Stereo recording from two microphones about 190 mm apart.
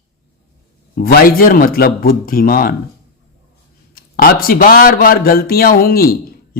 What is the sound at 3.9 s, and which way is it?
A man's voice, 50° left (ahead or behind).